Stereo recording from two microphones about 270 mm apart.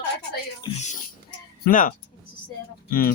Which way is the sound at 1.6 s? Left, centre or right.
Left.